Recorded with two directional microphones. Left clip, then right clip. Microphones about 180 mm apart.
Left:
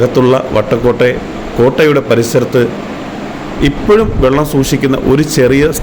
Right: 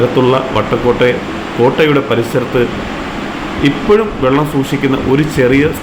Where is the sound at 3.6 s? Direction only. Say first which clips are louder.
Left 2 dB; 40° left (ahead or behind).